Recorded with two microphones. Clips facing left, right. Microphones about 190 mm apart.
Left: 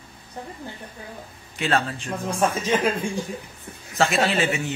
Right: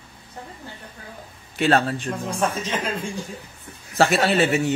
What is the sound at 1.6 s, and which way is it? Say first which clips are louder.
Speech: right 4 dB; 40° right (ahead or behind).